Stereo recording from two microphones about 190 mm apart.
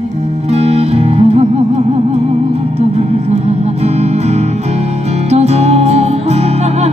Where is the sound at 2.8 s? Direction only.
35° right (ahead or behind).